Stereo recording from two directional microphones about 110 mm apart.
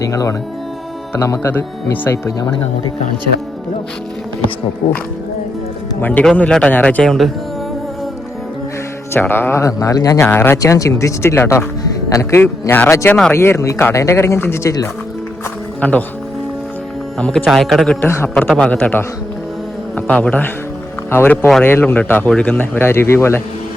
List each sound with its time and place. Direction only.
0.0 s speech: 30° left (ahead or behind)
6.0 s speech: 15° left (ahead or behind)
9.1 s speech: 20° left (ahead or behind)
10.2 s speech: 20° left (ahead or behind)
10.6 s speech: 30° left (ahead or behind)
15.8 s speech: 15° left (ahead or behind)
17.2 s speech: 5° left (ahead or behind)
18.0 s speech: 25° left (ahead or behind)
18.4 s speech: 5° left (ahead or behind); by 23.4 s 25° left (ahead or behind)